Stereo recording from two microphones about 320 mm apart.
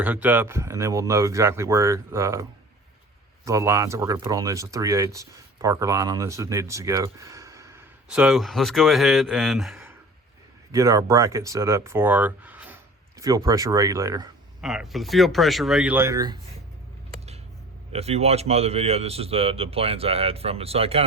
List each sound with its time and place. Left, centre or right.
0.0 s speech: centre
17.9 s speech: centre